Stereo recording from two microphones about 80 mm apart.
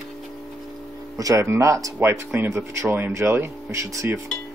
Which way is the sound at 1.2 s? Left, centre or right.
Right.